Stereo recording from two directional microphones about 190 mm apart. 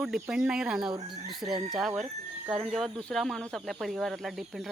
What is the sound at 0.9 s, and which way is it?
Speech, 25° right (ahead or behind).